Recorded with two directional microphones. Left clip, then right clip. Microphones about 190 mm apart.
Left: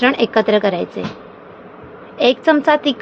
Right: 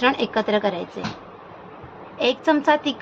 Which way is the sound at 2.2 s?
25° left (ahead or behind).